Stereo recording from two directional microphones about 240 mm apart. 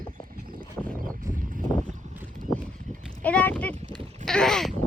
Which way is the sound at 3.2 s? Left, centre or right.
Centre.